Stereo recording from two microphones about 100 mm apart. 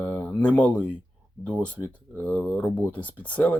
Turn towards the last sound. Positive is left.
turn(degrees=15)  # may be behind; listen again after turning